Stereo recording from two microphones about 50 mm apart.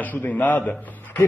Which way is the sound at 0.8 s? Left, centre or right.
Left.